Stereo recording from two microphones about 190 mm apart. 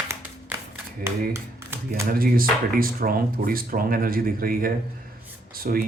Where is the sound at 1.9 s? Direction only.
50° right (ahead or behind).